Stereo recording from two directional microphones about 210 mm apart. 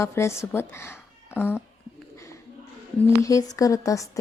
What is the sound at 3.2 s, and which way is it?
Speech, 15° left (ahead or behind).